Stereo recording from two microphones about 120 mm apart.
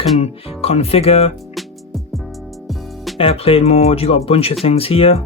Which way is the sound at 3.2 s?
50° left (ahead or behind).